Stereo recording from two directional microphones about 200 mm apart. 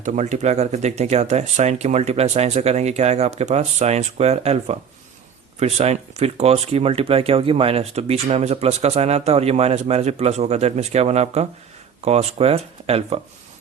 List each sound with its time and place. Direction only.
0.0 s speech: 35° right (ahead or behind)